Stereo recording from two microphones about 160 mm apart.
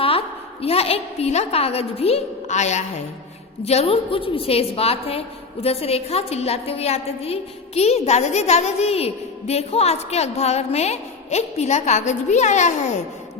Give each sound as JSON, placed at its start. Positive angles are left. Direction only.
{"t": 0.0, "sound": "a woman's voice", "side_deg": 35}